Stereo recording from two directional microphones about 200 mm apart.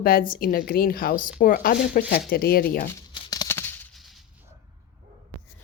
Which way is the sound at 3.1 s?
20° left (ahead or behind).